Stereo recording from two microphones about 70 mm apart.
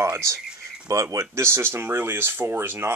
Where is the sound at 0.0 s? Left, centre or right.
Right.